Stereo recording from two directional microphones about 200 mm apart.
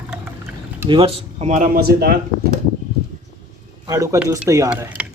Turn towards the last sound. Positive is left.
turn(degrees=-5)  # may be behind; listen again after turning